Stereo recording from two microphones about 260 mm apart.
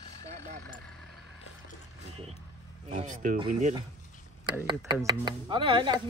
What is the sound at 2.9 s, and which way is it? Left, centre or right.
Speech, right.